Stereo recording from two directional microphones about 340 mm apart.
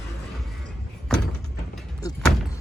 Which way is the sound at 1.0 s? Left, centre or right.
Centre.